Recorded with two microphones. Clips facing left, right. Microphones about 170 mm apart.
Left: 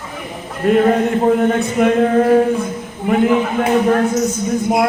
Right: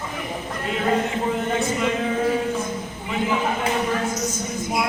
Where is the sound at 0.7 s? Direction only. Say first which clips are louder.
Left 10 dB; 55° left (ahead or behind).